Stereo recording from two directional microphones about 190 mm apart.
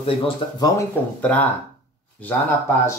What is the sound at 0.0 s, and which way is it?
Speech, 30° left (ahead or behind).